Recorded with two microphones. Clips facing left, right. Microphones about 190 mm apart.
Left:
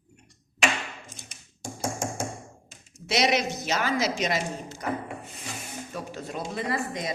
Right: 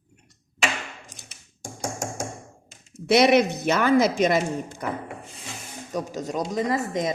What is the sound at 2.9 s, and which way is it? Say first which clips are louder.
A woman's voice: right 8 dB; 55° right (ahead or behind).